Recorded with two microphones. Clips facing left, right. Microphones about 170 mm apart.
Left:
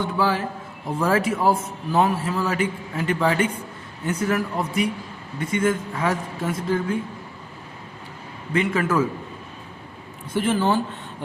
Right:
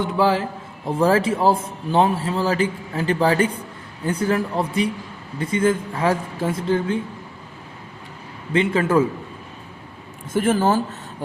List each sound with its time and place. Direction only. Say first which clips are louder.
0.0 s a man's voice: right 3 dB; 25° right (ahead or behind)
8.5 s a man's voice: right 3 dB; 30° right (ahead or behind)
10.3 s speech: right 3 dB; 45° right (ahead or behind)